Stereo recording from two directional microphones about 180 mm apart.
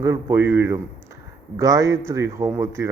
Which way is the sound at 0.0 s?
15° right (ahead or behind).